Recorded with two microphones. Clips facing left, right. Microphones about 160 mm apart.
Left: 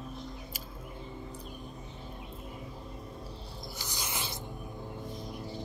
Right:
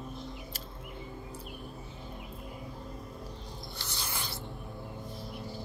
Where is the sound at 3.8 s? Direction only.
15° left (ahead or behind).